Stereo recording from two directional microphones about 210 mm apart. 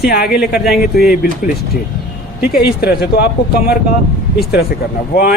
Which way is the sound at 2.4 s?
50° left (ahead or behind).